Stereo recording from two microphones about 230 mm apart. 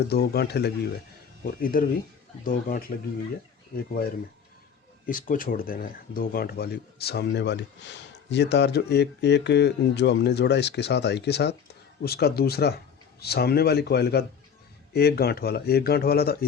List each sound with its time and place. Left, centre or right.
0.1 s speech: left
5.0 s speech: left